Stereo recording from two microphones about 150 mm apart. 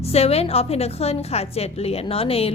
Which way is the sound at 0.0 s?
40° left (ahead or behind).